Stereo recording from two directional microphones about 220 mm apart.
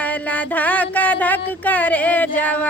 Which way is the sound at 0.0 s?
5° left (ahead or behind).